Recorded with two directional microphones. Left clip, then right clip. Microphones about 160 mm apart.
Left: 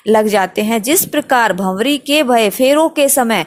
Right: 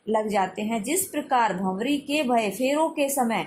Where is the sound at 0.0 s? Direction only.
55° left (ahead or behind).